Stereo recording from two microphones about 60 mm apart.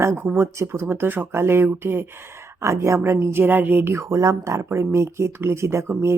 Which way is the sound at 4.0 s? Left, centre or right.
Right.